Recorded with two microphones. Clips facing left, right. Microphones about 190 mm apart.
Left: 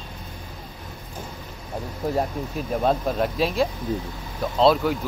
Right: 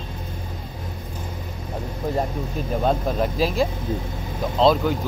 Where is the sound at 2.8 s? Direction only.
Centre (ahead or behind).